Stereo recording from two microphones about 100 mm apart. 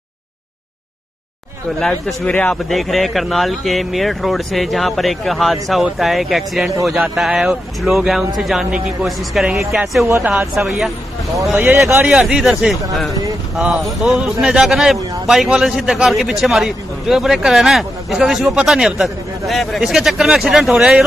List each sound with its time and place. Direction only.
1.8 s a man's voice: 5° left (ahead or behind)
2.7 s a man's voice: centre (ahead or behind)
11.6 s speech: 20° right (ahead or behind)
12.1 s a man's voice: 5° right (ahead or behind)